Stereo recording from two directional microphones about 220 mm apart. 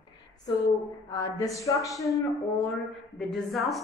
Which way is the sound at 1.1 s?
15° left (ahead or behind).